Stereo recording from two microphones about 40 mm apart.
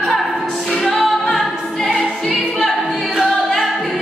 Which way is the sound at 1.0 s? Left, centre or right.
Centre.